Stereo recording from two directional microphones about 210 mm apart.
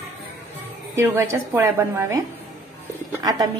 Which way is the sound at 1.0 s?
15° right (ahead or behind).